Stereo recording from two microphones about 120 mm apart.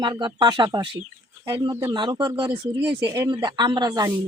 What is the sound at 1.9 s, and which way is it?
Speech, 40° right (ahead or behind).